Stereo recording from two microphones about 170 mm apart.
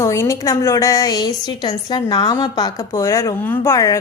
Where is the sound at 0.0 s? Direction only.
15° left (ahead or behind).